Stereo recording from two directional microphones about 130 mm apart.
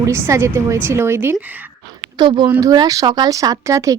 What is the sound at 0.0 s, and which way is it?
Speech, 20° right (ahead or behind).